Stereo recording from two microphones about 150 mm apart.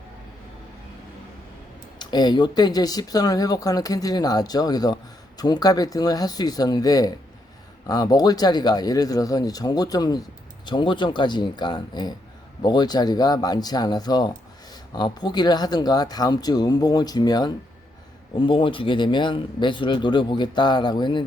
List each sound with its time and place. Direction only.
2.0 s speech: 30° left (ahead or behind)